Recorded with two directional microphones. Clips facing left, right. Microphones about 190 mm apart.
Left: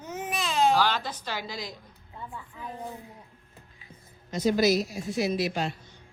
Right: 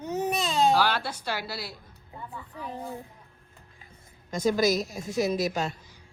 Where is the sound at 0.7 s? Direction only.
10° right (ahead or behind).